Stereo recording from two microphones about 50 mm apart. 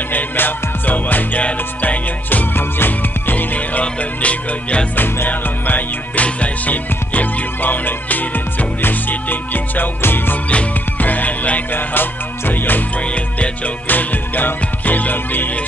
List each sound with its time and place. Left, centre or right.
0.1 s music: left
4.9 s music: left
10.5 s music: left
13.8 s music: left